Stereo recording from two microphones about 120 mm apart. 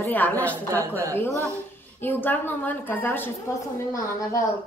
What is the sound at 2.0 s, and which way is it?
A woman's voice, 15° left (ahead or behind).